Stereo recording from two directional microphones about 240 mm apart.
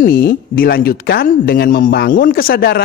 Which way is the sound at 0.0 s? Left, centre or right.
Left.